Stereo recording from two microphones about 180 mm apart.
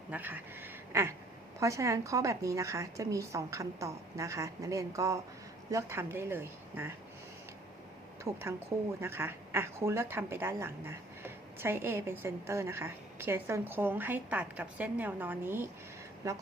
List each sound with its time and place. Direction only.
0.1 s a woman's voice: 10° right (ahead or behind)
8.2 s a woman's voice: 15° right (ahead or behind)